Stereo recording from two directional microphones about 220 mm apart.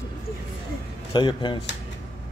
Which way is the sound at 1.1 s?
20° left (ahead or behind).